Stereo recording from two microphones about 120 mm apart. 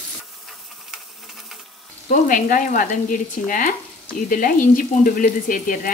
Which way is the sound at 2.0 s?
90° left.